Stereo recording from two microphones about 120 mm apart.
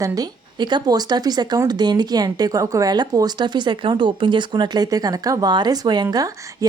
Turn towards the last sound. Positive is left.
turn(degrees=-35)  # may be behind; listen again after turning